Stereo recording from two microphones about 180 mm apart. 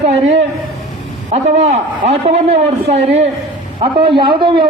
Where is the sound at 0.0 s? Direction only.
35° right (ahead or behind).